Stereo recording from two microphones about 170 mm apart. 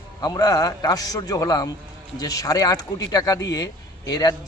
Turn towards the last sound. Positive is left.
turn(degrees=20)  # may be behind; listen again after turning